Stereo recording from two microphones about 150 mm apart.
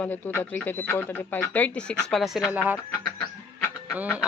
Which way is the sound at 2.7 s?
15° left (ahead or behind).